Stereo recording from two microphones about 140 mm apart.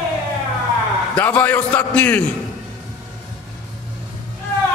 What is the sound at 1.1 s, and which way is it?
A man's voice, 10° left (ahead or behind).